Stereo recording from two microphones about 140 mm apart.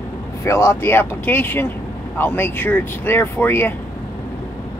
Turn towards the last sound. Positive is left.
turn(degrees=15)  # may be behind; listen again after turning